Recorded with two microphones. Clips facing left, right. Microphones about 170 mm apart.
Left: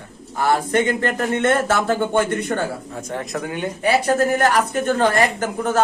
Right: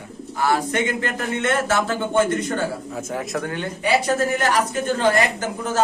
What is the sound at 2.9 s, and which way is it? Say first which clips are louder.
Speech: right 1 dB; 5° right (ahead or behind).